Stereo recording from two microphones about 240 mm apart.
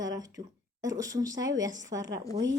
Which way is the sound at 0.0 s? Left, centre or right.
Centre.